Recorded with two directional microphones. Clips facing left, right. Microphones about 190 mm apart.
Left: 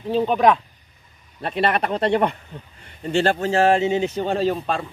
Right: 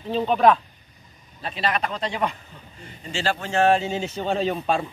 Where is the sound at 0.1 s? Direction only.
10° left (ahead or behind).